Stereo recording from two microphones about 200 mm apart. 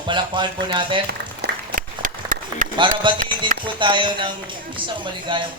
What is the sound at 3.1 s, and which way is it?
Speech, 25° right (ahead or behind).